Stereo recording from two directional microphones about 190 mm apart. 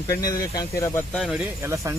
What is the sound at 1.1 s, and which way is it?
Speech, centre (ahead or behind).